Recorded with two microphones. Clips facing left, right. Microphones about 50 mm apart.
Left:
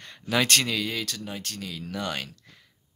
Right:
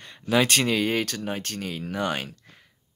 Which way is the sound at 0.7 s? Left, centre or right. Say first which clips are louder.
Right 6 dB; right.